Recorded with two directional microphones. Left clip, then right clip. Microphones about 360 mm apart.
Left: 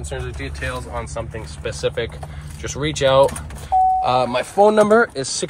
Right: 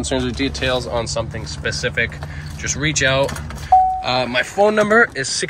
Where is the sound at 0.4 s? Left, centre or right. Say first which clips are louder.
Right 8 dB; centre.